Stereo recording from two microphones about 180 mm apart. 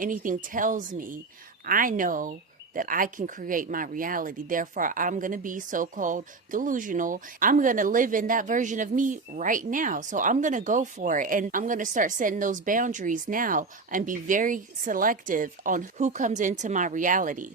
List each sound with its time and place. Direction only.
0.0 s speech: 45° right (ahead or behind)